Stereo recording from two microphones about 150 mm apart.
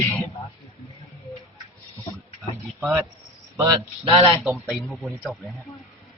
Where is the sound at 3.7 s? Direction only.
30° right (ahead or behind).